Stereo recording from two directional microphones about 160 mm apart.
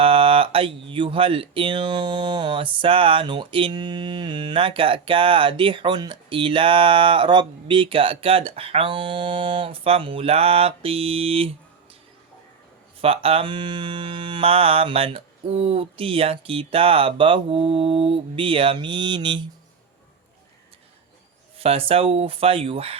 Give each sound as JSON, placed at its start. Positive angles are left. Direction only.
{"t": 0.0, "sound": "speech", "side_deg": -35}
{"t": 13.0, "sound": "speech", "side_deg": -35}
{"t": 21.6, "sound": "speech", "side_deg": -35}